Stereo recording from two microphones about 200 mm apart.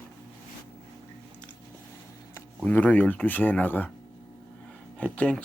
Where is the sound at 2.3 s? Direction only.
5° left (ahead or behind).